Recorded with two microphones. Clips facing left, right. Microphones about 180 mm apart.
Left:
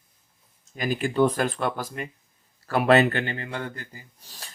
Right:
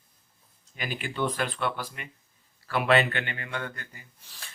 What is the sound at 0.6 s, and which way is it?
Speech, 45° left (ahead or behind).